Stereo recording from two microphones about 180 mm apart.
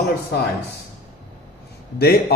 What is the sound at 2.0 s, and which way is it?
Speech, 60° left (ahead or behind).